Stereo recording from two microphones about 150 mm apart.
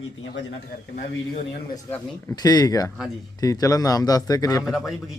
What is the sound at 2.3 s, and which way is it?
Speech, 25° left (ahead or behind).